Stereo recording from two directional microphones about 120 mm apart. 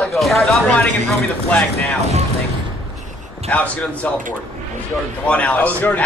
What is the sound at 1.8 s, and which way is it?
Speech, 65° right (ahead or behind).